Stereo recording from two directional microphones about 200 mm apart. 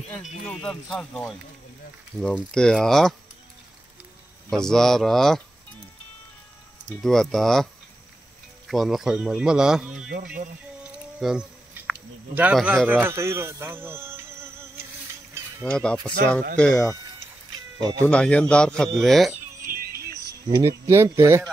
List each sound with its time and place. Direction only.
0.5 s speech: centre (ahead or behind)
4.5 s speech: centre (ahead or behind)
6.9 s speech: centre (ahead or behind)
8.6 s speech: centre (ahead or behind)
11.1 s speech: centre (ahead or behind)
15.6 s speech: 5° left (ahead or behind)
17.7 s speech: 20° right (ahead or behind)
18.0 s speech: 5° left (ahead or behind)
19.6 s music: 45° right (ahead or behind)
20.4 s speech: 15° right (ahead or behind)